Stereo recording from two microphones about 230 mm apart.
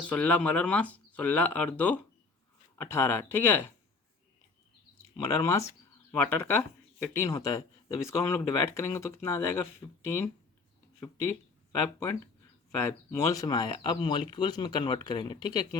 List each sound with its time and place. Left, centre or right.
0.1 s speech: centre
5.1 s speech: centre
11.0 s speech: centre
12.8 s speech: centre